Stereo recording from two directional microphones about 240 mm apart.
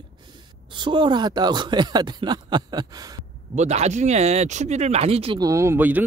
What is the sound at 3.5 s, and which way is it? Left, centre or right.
Speech, right.